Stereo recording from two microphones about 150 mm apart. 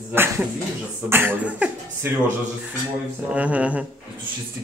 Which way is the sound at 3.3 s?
10° right (ahead or behind).